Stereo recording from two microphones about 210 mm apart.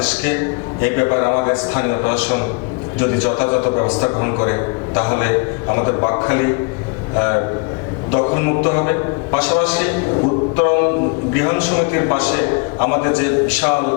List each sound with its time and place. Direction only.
0.8 s a man's voice: 15° left (ahead or behind)
10.6 s a sound: 20° left (ahead or behind)
11.3 s a man's voice: 20° left (ahead or behind)